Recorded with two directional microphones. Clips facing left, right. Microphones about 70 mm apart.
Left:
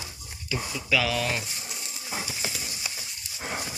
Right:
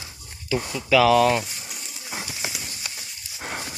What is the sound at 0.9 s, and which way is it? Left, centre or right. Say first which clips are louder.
Speech: right 10 dB; right.